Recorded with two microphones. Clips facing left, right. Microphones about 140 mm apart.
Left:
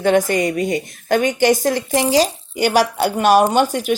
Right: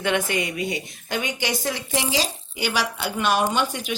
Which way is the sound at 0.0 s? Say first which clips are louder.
Left 8 dB; 40° left (ahead or behind).